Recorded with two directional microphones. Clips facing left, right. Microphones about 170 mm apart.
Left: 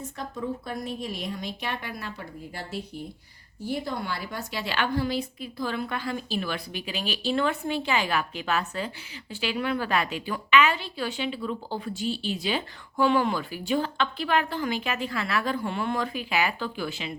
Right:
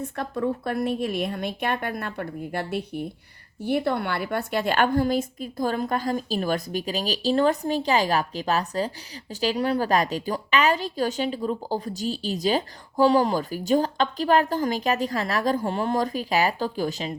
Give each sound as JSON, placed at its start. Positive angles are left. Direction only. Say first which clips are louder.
{"t": 0.2, "sound": "a woman's voice", "louder": "right 6 dB", "side_deg": -60}